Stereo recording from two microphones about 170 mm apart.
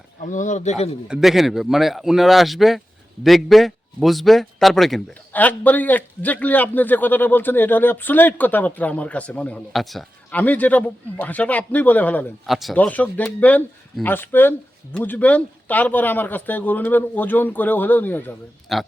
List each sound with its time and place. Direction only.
0.2 s speech: 50° left (ahead or behind)
1.0 s a man's voice: 5° right (ahead or behind)
12.5 s a man's voice: centre (ahead or behind)
18.7 s speech: centre (ahead or behind)